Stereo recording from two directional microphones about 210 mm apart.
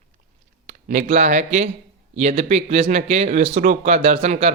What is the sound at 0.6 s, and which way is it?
Speech, 35° right (ahead or behind).